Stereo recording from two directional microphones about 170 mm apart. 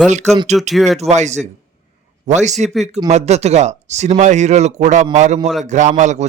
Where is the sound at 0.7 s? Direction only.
Centre (ahead or behind).